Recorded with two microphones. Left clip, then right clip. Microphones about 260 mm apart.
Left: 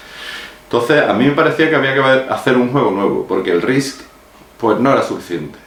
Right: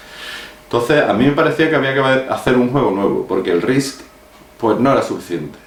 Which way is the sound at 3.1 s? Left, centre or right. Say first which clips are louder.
Left 1 dB; left.